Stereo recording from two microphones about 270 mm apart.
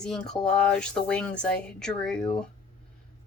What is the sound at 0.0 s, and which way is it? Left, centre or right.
Speech, centre.